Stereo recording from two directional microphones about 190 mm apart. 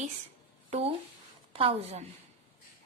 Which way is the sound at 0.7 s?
35° right (ahead or behind).